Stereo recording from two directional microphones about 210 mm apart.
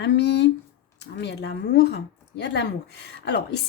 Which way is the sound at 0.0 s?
55° left (ahead or behind).